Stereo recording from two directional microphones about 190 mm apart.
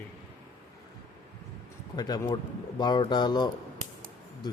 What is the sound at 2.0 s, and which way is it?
Speech, 20° left (ahead or behind).